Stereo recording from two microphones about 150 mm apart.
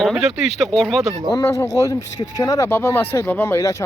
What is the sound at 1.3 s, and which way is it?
Speech, 20° left (ahead or behind).